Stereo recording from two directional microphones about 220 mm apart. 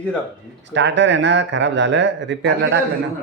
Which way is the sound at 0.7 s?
55° right (ahead or behind).